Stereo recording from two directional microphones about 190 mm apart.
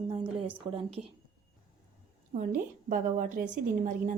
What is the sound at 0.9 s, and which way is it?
Speech, 30° right (ahead or behind).